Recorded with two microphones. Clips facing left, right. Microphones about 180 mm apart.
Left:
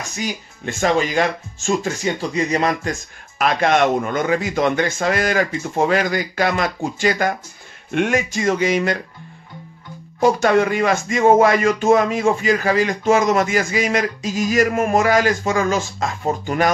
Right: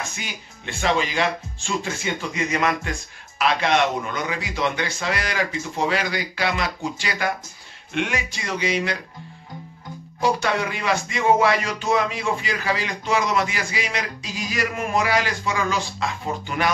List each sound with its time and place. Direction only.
0.1 s speech: 40° left (ahead or behind)
10.2 s speech: 45° left (ahead or behind)